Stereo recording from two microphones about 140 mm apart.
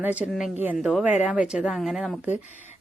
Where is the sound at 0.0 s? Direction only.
10° right (ahead or behind).